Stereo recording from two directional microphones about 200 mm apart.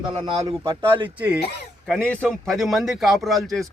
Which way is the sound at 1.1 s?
5° right (ahead or behind).